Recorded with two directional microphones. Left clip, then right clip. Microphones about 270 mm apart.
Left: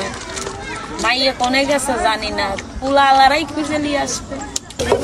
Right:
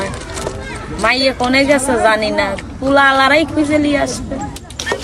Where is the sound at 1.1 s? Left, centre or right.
Centre.